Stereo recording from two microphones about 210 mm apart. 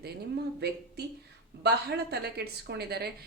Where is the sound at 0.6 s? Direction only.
50° right (ahead or behind).